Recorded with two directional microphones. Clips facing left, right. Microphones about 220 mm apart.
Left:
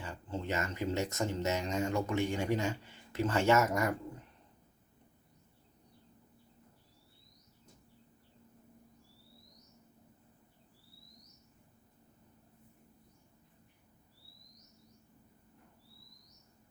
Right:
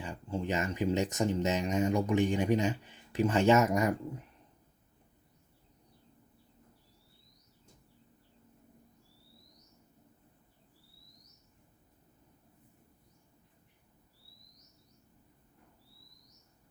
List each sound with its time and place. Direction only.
0.0 s speech: 15° right (ahead or behind)